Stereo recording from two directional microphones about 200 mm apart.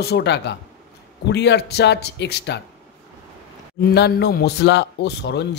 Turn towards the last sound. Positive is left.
turn(degrees=60)  # may be behind; listen again after turning